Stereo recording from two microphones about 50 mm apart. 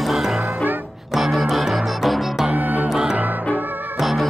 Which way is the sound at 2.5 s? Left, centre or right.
Right.